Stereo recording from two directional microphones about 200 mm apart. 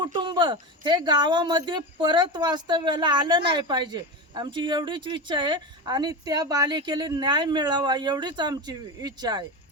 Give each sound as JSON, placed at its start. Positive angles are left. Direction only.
{"t": 0.0, "sound": "speech", "side_deg": -25}